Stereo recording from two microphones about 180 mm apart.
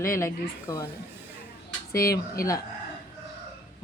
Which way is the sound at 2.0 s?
20° left (ahead or behind).